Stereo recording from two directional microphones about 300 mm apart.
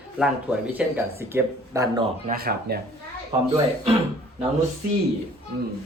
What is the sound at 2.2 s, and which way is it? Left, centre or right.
Speech, right.